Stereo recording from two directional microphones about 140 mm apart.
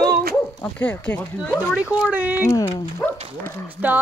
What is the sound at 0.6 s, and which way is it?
Speech, 10° left (ahead or behind).